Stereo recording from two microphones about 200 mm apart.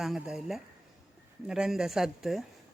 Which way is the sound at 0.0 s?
Centre (ahead or behind).